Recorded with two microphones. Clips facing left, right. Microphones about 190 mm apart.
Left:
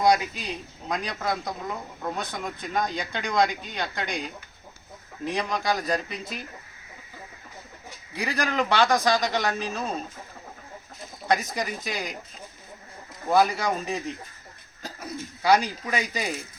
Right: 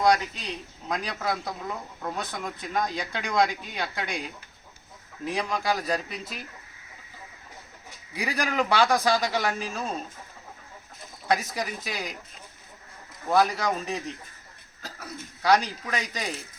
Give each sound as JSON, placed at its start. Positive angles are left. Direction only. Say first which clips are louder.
{"t": 0.0, "sound": "a man's voice", "louder": "left 1 dB", "side_deg": 10}
{"t": 8.1, "sound": "a man's voice", "louder": "left 1 dB", "side_deg": -10}
{"t": 11.3, "sound": "a man's voice", "louder": "left 1 dB", "side_deg": -5}
{"t": 13.2, "sound": "a man's voice", "louder": "left 1 dB", "side_deg": 0}
{"t": 14.8, "sound": "cough", "louder": "left 3 dB", "side_deg": 15}
{"t": 15.4, "sound": "a man's voice", "louder": "left 1 dB", "side_deg": 0}